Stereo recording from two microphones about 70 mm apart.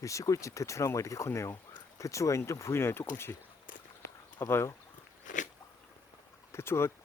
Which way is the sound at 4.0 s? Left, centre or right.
Left.